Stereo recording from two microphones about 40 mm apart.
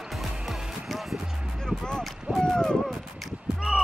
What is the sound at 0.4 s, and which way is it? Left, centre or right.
Music, centre.